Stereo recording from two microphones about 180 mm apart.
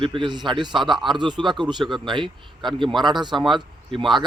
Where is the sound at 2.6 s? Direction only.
Centre (ahead or behind).